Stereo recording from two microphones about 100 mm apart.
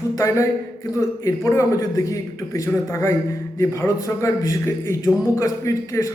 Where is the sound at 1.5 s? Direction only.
30° left (ahead or behind).